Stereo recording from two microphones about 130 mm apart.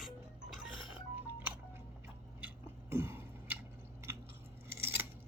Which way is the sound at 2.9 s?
15° right (ahead or behind).